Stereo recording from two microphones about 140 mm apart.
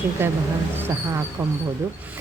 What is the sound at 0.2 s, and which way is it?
Speech, 15° right (ahead or behind).